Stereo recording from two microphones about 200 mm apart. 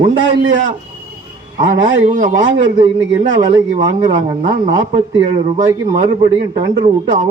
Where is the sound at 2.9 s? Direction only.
20° right (ahead or behind).